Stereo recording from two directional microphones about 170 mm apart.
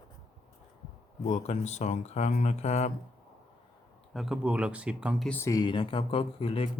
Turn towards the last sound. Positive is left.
turn(degrees=35)  # may be behind; listen again after turning